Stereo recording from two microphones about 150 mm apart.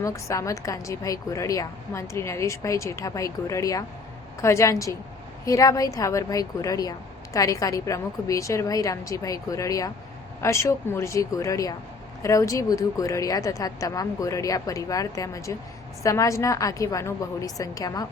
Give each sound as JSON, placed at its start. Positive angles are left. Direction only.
{"t": 0.0, "sound": "a woman's voice", "side_deg": 20}